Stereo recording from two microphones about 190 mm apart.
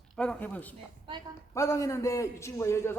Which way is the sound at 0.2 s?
5° left (ahead or behind).